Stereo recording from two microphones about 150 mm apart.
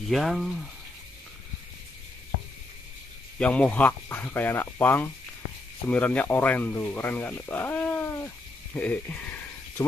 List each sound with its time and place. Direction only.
0.1 s speech: centre (ahead or behind)
3.3 s speech: 10° left (ahead or behind)
8.7 s a sound: 10° left (ahead or behind)